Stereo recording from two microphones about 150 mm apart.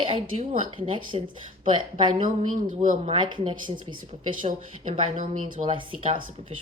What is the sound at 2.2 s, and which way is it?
Speech, 60° right (ahead or behind).